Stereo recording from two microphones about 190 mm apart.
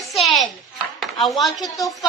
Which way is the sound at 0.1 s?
Centre (ahead or behind).